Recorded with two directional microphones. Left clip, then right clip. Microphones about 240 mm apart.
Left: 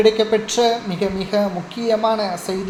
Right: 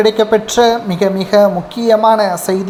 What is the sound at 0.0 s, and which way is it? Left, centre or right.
A woman's voice, right.